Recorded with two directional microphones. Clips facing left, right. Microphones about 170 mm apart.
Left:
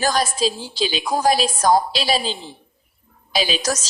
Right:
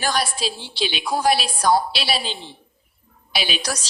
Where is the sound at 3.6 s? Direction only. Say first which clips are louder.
Left 5 dB; 45° left (ahead or behind).